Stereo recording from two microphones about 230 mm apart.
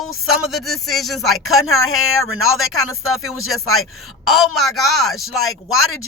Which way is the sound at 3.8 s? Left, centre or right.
Centre.